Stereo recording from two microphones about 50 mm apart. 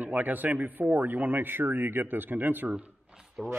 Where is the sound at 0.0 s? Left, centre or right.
Right.